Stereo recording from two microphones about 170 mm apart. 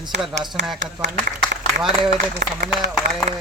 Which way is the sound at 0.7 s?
90° right.